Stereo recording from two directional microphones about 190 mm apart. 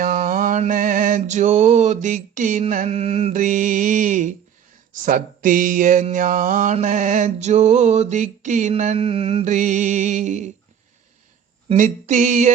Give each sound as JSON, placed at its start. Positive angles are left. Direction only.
{"t": 0.0, "sound": "speech", "side_deg": -45}
{"t": 11.7, "sound": "speech", "side_deg": -40}